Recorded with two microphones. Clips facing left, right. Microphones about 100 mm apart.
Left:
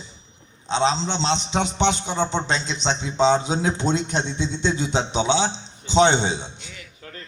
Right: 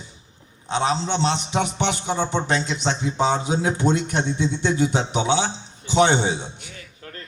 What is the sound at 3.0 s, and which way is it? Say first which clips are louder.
A man's voice: left 5 dB; 20° left (ahead or behind).